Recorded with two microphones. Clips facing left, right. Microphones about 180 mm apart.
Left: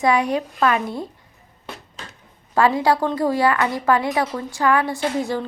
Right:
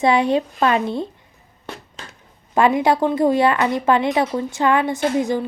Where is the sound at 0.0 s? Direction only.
25° right (ahead or behind).